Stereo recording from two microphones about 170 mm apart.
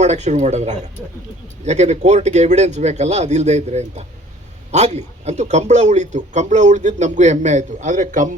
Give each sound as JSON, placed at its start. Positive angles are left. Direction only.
{"t": 0.0, "sound": "speech", "side_deg": -40}